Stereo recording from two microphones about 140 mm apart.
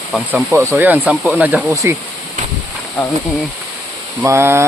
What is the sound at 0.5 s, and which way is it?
Speech, 20° right (ahead or behind).